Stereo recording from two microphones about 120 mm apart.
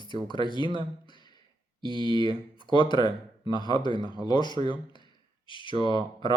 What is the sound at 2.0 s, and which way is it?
Speech, 40° left (ahead or behind).